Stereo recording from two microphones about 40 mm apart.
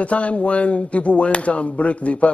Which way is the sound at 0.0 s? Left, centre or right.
Left.